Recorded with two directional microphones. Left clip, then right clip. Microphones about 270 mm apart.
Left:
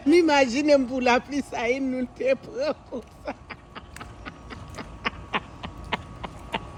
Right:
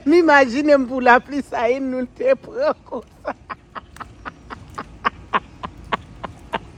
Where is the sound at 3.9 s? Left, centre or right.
Centre.